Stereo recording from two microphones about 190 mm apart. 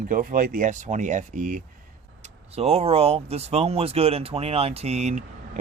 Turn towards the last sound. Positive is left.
turn(degrees=-35)  # may be behind; listen again after turning